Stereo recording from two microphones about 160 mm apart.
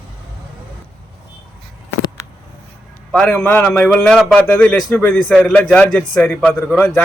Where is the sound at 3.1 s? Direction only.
5° left (ahead or behind).